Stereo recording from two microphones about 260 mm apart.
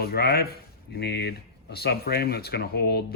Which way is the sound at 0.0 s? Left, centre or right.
Left.